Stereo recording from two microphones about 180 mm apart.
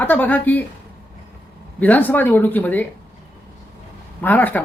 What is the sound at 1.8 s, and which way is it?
Speech, 10° left (ahead or behind).